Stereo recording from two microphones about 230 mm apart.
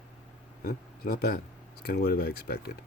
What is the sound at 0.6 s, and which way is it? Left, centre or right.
Speech, left.